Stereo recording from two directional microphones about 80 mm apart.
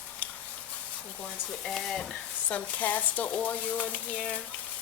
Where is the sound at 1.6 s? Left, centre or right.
Centre.